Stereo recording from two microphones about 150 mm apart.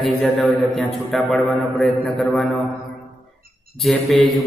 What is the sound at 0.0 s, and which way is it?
Mantra, centre (ahead or behind).